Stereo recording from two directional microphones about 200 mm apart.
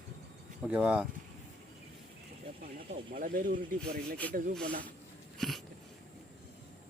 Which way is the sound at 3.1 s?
45° right (ahead or behind).